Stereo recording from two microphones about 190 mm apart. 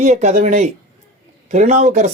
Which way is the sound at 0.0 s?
40° right (ahead or behind).